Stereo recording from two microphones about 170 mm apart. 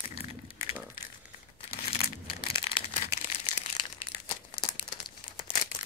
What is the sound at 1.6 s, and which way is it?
Crumpling, 35° left (ahead or behind).